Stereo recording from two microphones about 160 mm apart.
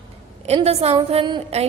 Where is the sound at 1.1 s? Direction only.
30° right (ahead or behind).